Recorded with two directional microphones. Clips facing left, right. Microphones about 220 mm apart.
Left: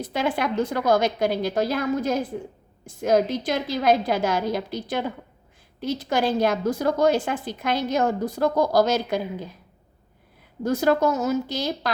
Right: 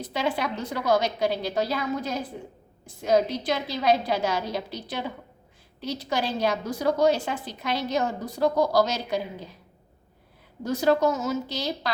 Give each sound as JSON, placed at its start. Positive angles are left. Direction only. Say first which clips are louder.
{"t": 0.0, "sound": "a woman's voice", "louder": "left 3 dB", "side_deg": 50}
{"t": 10.6, "sound": "a woman's voice", "louder": "left 2 dB", "side_deg": 50}